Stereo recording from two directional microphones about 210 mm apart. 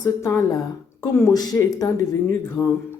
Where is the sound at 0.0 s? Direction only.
15° left (ahead or behind).